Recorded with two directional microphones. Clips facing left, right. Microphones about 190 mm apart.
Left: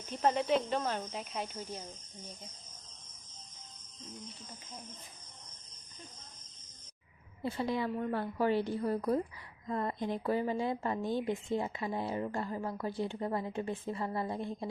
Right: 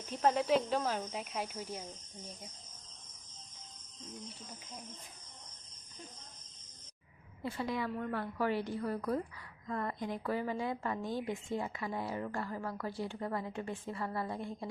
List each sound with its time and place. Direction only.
0.0 s speech: centre (ahead or behind)
7.4 s a woman's voice: 25° left (ahead or behind)